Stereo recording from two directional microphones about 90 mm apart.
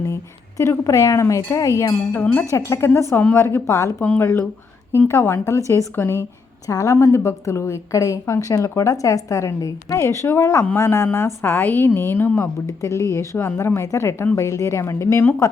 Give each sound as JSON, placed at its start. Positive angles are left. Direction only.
{"t": 0.0, "sound": "a woman's voice", "side_deg": 30}
{"t": 1.4, "sound": "wind chime", "side_deg": 45}
{"t": 2.6, "sound": "a woman's voice", "side_deg": 30}
{"t": 4.0, "sound": "a woman's voice", "side_deg": 25}
{"t": 12.6, "sound": "a woman's voice", "side_deg": 35}